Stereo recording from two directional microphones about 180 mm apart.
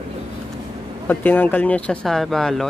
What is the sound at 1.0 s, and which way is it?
Speech, 10° left (ahead or behind).